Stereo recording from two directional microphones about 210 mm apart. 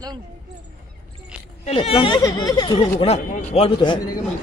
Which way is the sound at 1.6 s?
25° left (ahead or behind).